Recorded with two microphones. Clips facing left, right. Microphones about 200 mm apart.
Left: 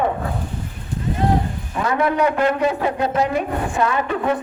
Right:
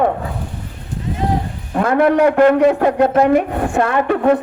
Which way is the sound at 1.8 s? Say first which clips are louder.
Right 6 dB; 60° right (ahead or behind).